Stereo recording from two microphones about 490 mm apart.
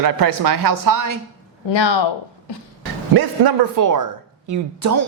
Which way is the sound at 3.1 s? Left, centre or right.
Right.